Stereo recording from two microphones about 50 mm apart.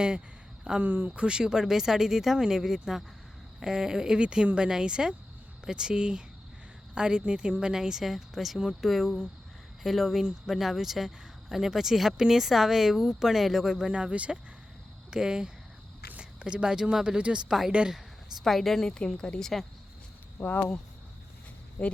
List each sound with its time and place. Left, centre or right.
0.8 s speech: right
1.2 s speech: centre
13.9 s speech: right
18.4 s speech: centre
18.9 s speech: centre
20.4 s speech: left